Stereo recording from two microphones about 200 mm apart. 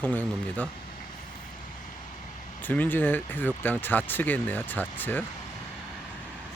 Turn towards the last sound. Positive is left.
turn(degrees=10)  # may be behind; listen again after turning